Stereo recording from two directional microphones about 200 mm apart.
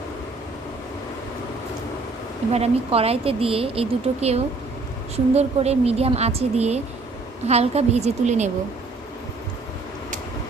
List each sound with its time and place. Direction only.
2.5 s a woman's voice: 30° right (ahead or behind)